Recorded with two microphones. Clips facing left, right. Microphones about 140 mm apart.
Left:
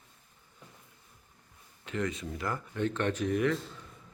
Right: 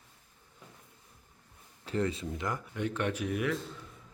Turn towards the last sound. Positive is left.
turn(degrees=-10)  # may be behind; listen again after turning